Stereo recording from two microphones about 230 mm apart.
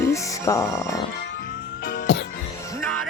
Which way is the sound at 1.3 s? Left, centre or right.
Left.